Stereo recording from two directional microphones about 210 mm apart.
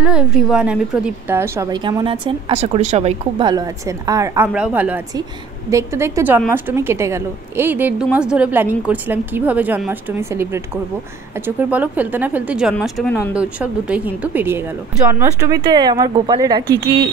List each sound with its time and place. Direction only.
0.0 s a woman's voice: 5° right (ahead or behind)
13.3 s a woman's voice: 5° right (ahead or behind)